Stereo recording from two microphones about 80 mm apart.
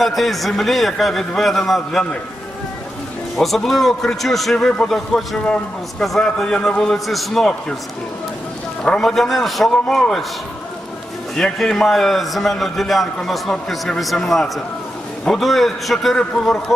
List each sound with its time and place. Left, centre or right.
0.0 s a man's voice: centre
3.3 s a man's voice: centre
8.8 s a man's voice: centre
11.3 s a man's voice: centre